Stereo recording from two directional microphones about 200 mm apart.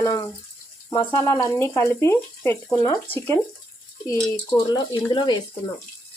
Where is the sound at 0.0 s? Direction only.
15° left (ahead or behind).